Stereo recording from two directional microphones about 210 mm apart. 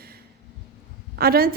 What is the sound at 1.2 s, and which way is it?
Speech, 45° right (ahead or behind).